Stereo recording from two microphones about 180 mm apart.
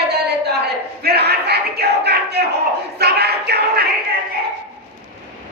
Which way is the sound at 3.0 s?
65° right (ahead or behind).